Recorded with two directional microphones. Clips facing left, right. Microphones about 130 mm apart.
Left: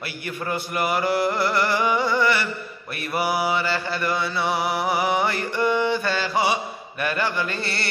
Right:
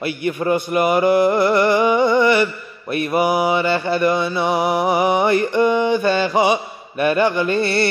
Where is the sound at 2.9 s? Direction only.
20° right (ahead or behind).